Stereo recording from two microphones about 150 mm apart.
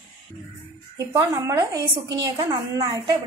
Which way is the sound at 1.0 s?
20° right (ahead or behind).